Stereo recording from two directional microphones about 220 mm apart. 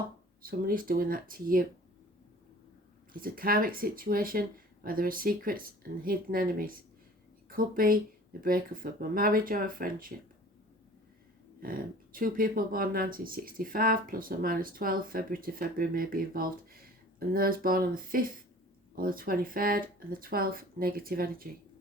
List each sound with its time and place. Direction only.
0.4 s speech: 40° right (ahead or behind)
3.1 s speech: 40° right (ahead or behind)
11.6 s speech: 40° right (ahead or behind)